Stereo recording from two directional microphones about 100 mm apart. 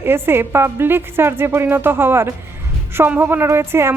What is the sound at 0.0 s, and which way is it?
Speech, 25° right (ahead or behind).